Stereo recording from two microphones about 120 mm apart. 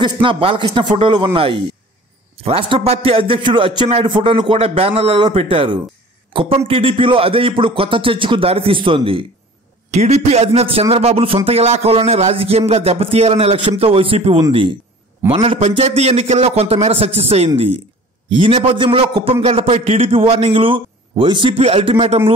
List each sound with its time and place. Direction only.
0.0 s a man's voice: 40° right (ahead or behind)
9.8 s a man's voice: 65° right (ahead or behind); by 21.5 s 45° right (ahead or behind)
21.5 s a man's voice: 60° right (ahead or behind)